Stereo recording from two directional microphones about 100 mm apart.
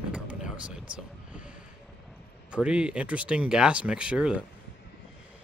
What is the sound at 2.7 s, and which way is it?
Speech, 10° right (ahead or behind).